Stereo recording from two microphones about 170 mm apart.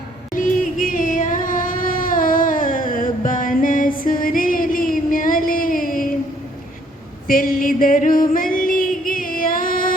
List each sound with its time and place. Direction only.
0.3 s music: 50° left (ahead or behind)
7.3 s music: 55° left (ahead or behind)